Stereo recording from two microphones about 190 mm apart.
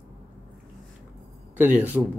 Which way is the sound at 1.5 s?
10° right (ahead or behind).